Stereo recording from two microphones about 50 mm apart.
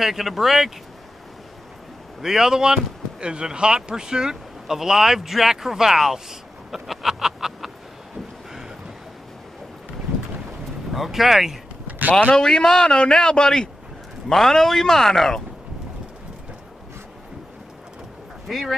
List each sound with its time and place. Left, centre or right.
0.0 s speech: centre
2.2 s speech: centre
6.7 s a sound: centre
10.9 s speech: centre
12.1 s a man's voice: left
12.4 s a man's voice: centre
18.5 s speech: centre